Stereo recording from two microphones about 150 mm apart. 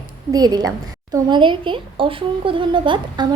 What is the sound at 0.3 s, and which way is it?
A woman's voice, 25° right (ahead or behind).